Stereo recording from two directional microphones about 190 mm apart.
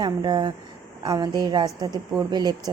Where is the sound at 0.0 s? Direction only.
25° right (ahead or behind).